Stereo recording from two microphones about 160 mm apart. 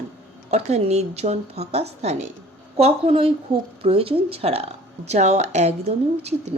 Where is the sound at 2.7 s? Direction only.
40° right (ahead or behind).